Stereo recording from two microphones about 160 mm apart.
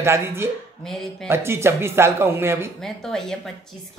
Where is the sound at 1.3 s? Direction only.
15° right (ahead or behind).